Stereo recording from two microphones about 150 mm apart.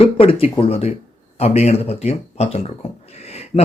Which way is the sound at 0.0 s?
40° left (ahead or behind).